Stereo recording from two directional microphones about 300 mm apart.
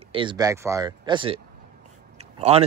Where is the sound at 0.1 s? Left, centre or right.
Centre.